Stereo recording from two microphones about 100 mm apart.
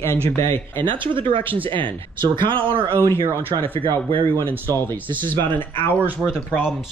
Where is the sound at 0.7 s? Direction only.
55° right (ahead or behind).